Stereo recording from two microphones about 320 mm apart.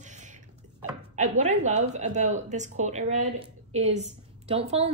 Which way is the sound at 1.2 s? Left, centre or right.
Right.